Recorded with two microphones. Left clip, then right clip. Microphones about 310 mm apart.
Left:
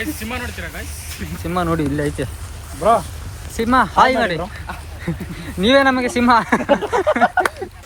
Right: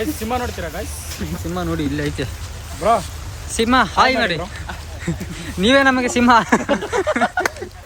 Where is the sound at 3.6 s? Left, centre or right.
Centre.